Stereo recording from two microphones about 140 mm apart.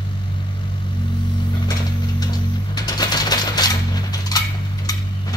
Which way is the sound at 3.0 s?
30° left (ahead or behind).